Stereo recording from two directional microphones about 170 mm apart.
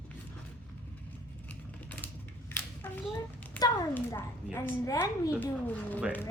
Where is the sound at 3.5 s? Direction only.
25° left (ahead or behind).